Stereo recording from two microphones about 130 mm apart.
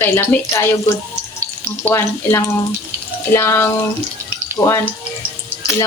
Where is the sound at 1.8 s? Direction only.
20° left (ahead or behind).